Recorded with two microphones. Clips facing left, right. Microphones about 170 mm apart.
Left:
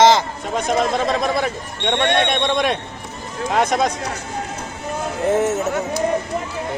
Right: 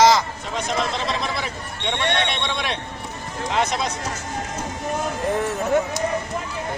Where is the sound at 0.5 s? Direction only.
45° left (ahead or behind).